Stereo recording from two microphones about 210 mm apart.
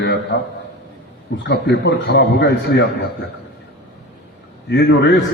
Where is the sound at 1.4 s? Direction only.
55° left (ahead or behind).